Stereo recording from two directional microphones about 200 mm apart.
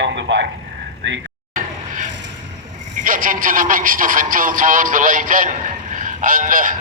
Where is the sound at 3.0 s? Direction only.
45° right (ahead or behind).